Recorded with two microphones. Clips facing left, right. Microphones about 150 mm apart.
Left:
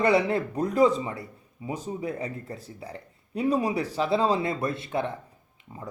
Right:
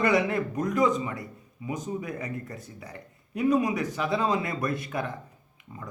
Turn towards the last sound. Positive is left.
turn(degrees=30)  # may be behind; listen again after turning